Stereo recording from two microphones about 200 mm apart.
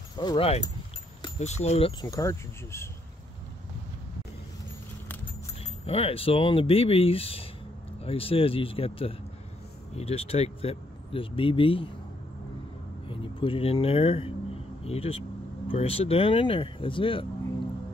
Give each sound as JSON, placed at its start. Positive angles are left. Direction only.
{"t": 0.2, "sound": "speech", "side_deg": 25}
{"t": 5.9, "sound": "speech", "side_deg": 30}
{"t": 13.1, "sound": "speech", "side_deg": 25}